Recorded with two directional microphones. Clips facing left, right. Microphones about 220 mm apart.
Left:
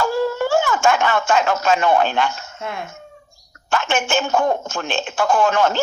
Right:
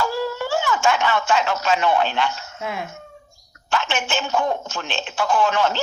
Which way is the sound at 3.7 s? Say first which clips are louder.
Left 4 dB; 50° left (ahead or behind).